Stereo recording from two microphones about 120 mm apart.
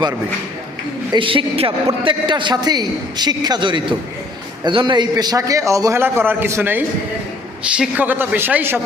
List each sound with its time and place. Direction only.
1.1 s a woman's voice: 45° right (ahead or behind); by 8.8 s 15° right (ahead or behind)